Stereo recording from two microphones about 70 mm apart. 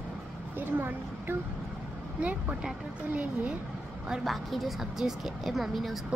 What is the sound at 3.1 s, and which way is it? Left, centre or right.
Speech, centre.